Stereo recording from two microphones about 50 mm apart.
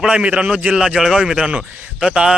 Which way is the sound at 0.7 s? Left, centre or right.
Centre.